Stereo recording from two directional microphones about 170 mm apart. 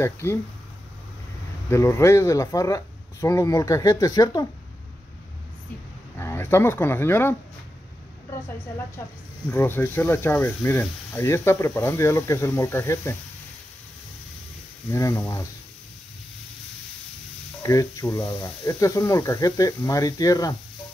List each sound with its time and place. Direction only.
0.0 s speech: 15° left (ahead or behind)
1.7 s speech: 15° left (ahead or behind)
6.1 s speech: 15° left (ahead or behind)
9.5 s speech: 15° left (ahead or behind)
14.9 s speech: 15° left (ahead or behind)
17.6 s speech: 20° left (ahead or behind)